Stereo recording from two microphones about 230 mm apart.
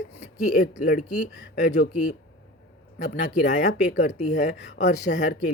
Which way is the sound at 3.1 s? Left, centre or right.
Left.